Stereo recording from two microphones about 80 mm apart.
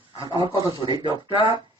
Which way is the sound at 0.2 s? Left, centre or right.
Right.